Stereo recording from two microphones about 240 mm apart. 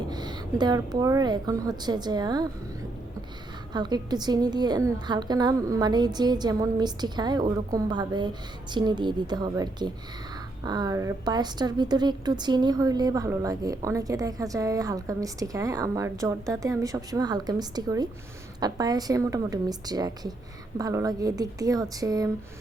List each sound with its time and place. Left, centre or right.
0.1 s a woman's voice: centre
3.7 s a woman's voice: centre